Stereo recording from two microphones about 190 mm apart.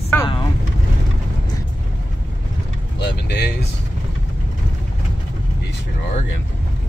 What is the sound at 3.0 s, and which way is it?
Speech, 60° left (ahead or behind).